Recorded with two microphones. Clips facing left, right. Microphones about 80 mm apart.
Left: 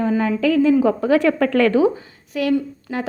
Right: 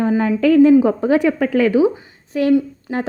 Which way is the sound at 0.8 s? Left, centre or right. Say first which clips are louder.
Right 1 dB; right.